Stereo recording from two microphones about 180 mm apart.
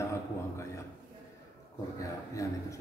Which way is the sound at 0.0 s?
15° left (ahead or behind).